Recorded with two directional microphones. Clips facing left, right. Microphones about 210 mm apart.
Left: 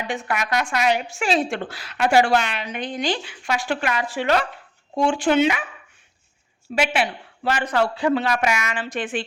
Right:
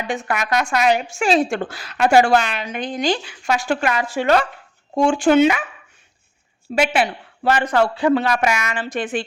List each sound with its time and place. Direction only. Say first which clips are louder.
0.1 s a woman's voice: right 3 dB; 45° right (ahead or behind)
6.7 s a woman's voice: right 3 dB; 35° right (ahead or behind)
7.4 s a woman's voice: right 4 dB; 50° right (ahead or behind)